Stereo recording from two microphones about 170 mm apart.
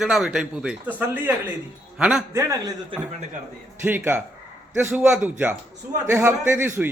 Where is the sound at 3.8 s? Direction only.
10° right (ahead or behind).